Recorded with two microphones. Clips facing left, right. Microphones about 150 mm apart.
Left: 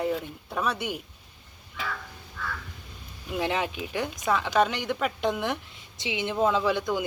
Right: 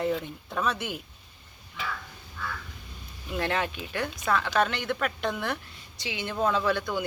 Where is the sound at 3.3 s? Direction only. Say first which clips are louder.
Left 1 dB; 15° left (ahead or behind).